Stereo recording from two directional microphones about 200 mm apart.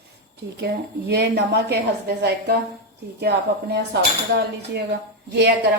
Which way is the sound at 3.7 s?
55° right (ahead or behind).